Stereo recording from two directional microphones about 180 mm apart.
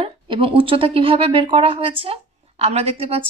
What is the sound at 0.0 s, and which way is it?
A woman's voice, 30° right (ahead or behind).